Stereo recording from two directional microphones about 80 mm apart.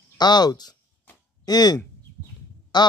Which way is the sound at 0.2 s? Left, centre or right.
Left.